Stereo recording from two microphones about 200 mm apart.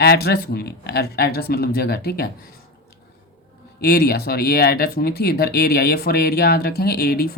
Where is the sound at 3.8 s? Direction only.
50° left (ahead or behind).